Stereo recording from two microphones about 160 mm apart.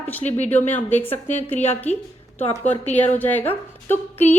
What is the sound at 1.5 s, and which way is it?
Speech, 40° left (ahead or behind).